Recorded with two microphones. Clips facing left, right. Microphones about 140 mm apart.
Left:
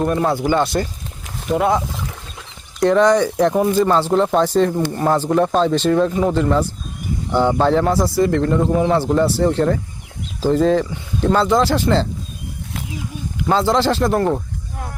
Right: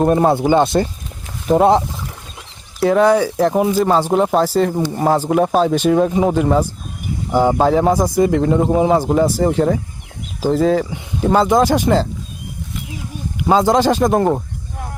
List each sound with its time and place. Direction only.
0.0 s speech: 30° right (ahead or behind)
1.5 s speech: 35° right (ahead or behind)
2.8 s speech: 5° right (ahead or behind)
13.5 s speech: 15° right (ahead or behind)